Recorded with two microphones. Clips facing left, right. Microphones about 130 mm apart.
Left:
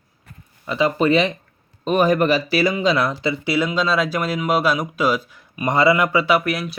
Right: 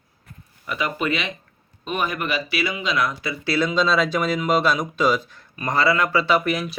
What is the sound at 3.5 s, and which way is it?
Speech, 10° left (ahead or behind).